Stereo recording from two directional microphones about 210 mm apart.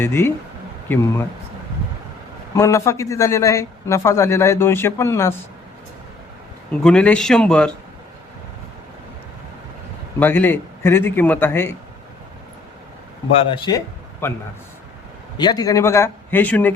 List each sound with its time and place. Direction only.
0.0 s speech: 10° left (ahead or behind)
2.6 s speech: 15° left (ahead or behind)
6.8 s speech: 5° left (ahead or behind)
10.2 s speech: 10° left (ahead or behind)
13.5 s speech: 15° left (ahead or behind)
15.4 s speech: 20° left (ahead or behind)